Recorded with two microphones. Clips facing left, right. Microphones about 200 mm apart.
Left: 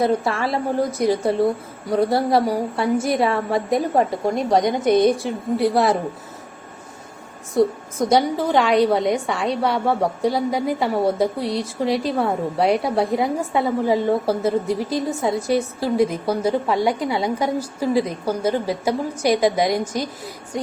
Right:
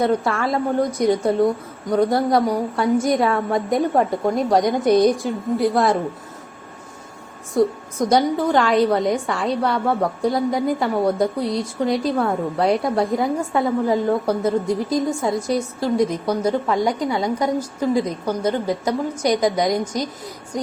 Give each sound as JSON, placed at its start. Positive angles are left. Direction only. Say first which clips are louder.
{"t": 0.4, "sound": "a woman's voice", "louder": "right 1 dB", "side_deg": 5}
{"t": 2.1, "sound": "a woman's voice", "louder": "even", "side_deg": 30}
{"t": 2.7, "sound": "a woman's voice", "louder": "right 3 dB", "side_deg": 5}
{"t": 7.5, "sound": "a woman's voice", "louder": "even", "side_deg": 0}